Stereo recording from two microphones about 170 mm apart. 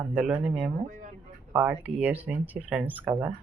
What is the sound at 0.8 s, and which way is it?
Speech, 50° right (ahead or behind).